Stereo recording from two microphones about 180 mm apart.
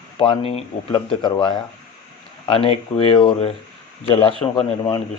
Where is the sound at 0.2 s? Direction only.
30° left (ahead or behind).